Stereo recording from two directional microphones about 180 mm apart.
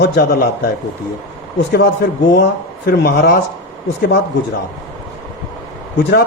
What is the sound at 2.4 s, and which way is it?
Speech, 60° left (ahead or behind).